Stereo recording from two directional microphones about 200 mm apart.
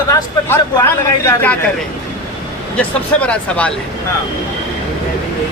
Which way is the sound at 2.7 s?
5° left (ahead or behind).